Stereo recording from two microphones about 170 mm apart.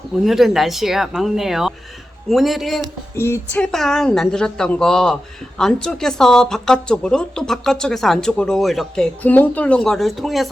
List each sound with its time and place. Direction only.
0.3 s speech: centre (ahead or behind)
3.2 s speech: 15° left (ahead or behind)